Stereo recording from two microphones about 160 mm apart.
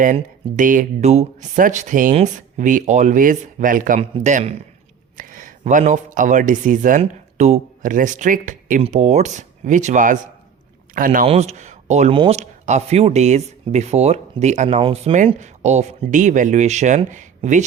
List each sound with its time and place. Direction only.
0.0 s speech: 55° right (ahead or behind)
8.8 s speech: 45° right (ahead or behind)
11.3 s speech: 45° right (ahead or behind)
14.8 s speech: 35° right (ahead or behind)
15.4 s speech: 45° right (ahead or behind)